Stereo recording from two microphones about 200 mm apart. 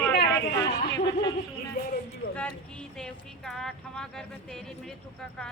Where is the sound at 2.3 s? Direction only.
5° left (ahead or behind).